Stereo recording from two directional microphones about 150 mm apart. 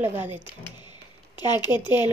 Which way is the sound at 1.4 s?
30° left (ahead or behind).